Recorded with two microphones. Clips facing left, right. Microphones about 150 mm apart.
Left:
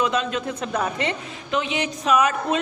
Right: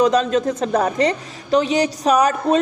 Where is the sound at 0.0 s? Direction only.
35° right (ahead or behind).